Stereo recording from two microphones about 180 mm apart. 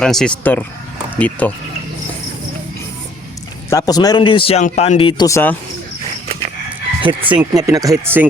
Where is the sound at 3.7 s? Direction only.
20° left (ahead or behind).